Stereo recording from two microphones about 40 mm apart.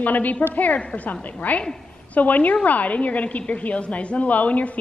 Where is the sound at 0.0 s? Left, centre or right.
Left.